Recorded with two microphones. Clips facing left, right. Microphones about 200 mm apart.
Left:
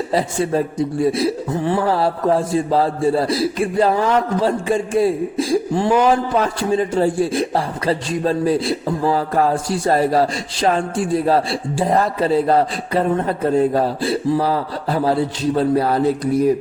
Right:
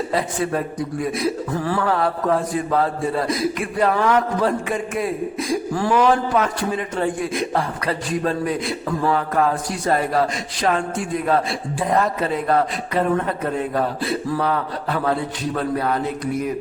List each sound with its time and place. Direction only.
0.1 s a man's voice: 30° left (ahead or behind)